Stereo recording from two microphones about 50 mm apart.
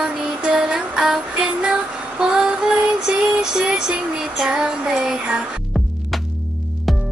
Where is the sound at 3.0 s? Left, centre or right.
Centre.